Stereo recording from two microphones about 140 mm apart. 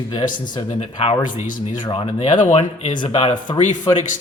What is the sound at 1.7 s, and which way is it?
Speech, 35° left (ahead or behind).